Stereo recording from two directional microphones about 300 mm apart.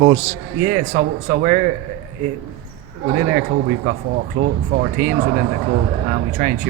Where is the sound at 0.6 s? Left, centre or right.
Right.